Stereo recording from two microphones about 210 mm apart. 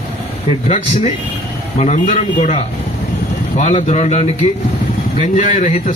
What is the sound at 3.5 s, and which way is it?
A man's voice, 30° left (ahead or behind).